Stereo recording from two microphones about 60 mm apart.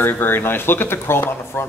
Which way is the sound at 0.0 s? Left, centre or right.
Left.